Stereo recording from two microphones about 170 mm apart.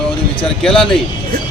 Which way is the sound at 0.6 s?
Centre (ahead or behind).